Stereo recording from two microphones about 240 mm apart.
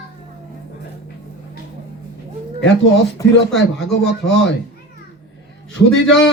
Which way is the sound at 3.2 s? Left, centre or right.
Centre.